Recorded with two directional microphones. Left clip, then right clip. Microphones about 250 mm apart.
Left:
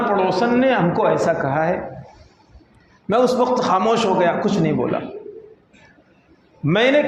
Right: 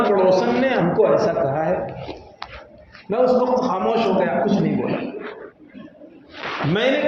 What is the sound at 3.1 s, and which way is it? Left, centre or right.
A man's voice, left.